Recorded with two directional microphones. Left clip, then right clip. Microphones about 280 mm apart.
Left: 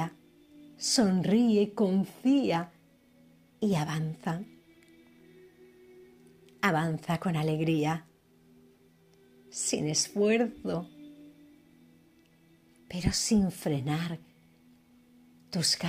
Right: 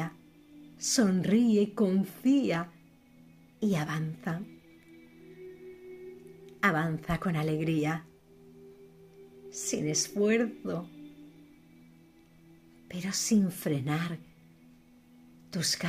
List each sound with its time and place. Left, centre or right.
0.7 s a woman's voice: centre
6.4 s a woman's voice: centre
9.5 s a woman's voice: centre
12.8 s a woman's voice: centre
15.5 s a woman's voice: centre